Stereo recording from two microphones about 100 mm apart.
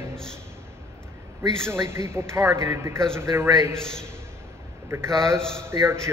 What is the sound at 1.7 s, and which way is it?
Speech, 25° right (ahead or behind).